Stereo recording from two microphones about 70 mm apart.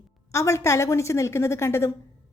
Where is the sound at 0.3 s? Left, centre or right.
Left.